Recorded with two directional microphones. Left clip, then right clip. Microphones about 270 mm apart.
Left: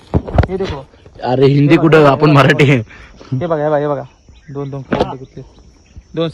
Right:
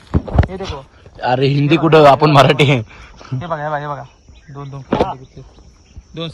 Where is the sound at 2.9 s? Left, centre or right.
Centre.